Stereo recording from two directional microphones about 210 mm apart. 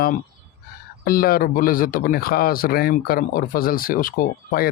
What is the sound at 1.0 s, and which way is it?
Speech, 45° left (ahead or behind).